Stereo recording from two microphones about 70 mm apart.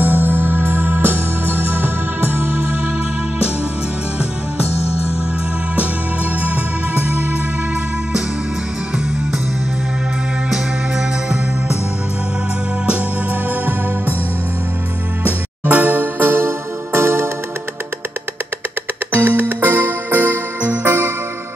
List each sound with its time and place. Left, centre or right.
0.0 s music: right
6.4 s music: right
10.5 s music: centre
12.8 s music: centre
15.2 s music: right
19.1 s music: right